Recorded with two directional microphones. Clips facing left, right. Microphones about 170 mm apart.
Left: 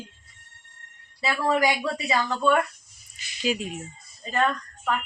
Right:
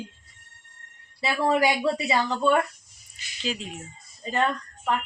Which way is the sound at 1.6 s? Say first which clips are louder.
Right 2 dB; 20° right (ahead or behind).